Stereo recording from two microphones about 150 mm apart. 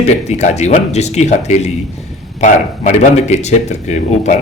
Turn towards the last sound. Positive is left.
turn(degrees=50)  # may be behind; listen again after turning